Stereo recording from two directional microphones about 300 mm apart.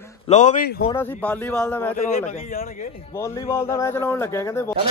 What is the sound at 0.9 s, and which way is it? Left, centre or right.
A man's voice, centre.